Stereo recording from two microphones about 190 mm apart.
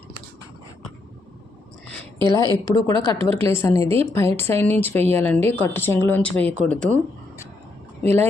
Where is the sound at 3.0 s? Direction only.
30° right (ahead or behind).